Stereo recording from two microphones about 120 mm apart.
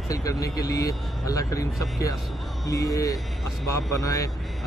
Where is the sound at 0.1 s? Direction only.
30° left (ahead or behind).